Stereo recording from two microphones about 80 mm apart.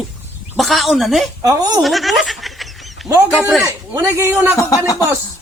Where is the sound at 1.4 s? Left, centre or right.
Right.